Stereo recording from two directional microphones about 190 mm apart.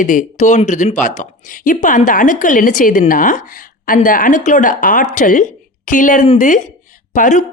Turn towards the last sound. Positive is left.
turn(degrees=40)  # may be behind; listen again after turning